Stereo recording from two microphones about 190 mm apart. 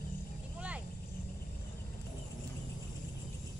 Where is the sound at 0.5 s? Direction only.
5° right (ahead or behind).